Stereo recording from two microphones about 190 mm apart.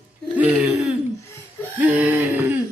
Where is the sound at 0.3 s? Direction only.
10° right (ahead or behind).